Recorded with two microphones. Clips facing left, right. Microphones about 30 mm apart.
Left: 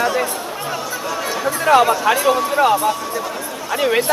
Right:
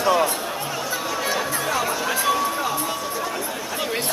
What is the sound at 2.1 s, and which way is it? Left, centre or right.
Speech, centre.